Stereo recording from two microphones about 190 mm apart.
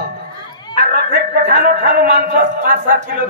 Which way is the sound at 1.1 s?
55° right (ahead or behind).